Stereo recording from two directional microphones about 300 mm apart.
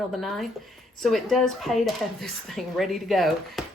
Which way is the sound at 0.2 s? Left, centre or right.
Centre.